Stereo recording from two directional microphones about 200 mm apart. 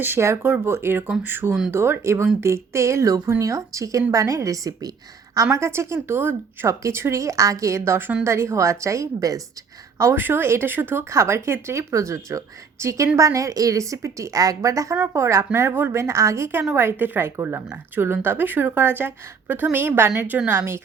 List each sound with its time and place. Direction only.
0.0 s a woman's voice: 10° right (ahead or behind)